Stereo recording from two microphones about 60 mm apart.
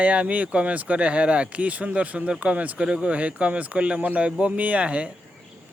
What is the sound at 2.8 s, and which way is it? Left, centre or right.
A man's voice, centre.